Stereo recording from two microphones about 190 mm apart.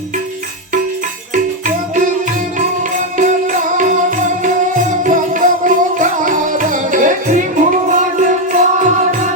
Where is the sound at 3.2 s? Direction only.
40° right (ahead or behind).